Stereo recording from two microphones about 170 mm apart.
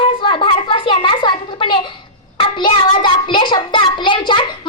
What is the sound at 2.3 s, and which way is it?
Child singing, 25° left (ahead or behind).